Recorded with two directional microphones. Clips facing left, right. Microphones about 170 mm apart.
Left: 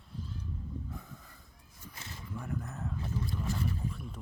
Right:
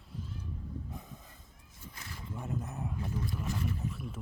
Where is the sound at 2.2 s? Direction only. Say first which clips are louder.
Right 1 dB; 25° right (ahead or behind).